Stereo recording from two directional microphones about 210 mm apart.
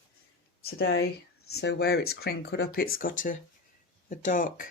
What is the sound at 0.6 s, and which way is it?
Speech, 50° left (ahead or behind).